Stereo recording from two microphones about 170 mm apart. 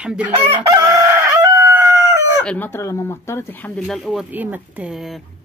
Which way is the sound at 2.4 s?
10° left (ahead or behind).